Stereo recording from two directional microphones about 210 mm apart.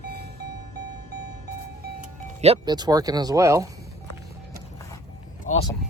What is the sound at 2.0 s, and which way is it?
Speech, 30° right (ahead or behind).